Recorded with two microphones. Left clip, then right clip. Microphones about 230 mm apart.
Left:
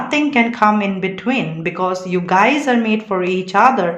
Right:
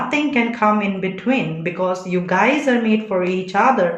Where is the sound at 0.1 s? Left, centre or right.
Left.